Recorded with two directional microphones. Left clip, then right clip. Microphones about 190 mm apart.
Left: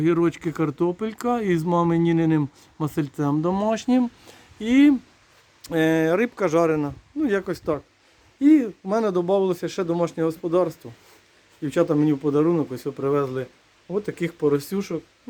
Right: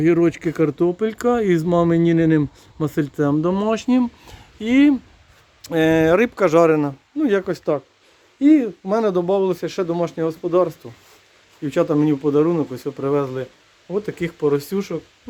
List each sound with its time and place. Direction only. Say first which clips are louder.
0.0 s speech: right 4 dB; centre (ahead or behind)